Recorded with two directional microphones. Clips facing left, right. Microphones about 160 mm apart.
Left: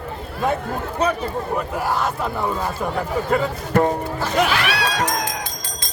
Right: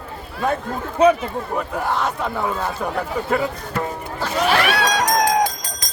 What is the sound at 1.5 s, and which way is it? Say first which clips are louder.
A man's voice: right 1 dB; 5° left (ahead or behind).